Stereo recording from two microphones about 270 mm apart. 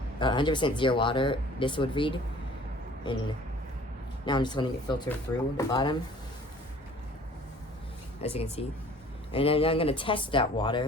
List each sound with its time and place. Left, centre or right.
0.2 s speech: centre
4.3 s speech: centre
8.2 s speech: left